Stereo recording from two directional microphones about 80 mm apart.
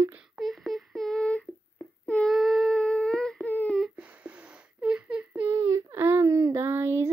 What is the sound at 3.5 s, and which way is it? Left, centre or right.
Humming, left.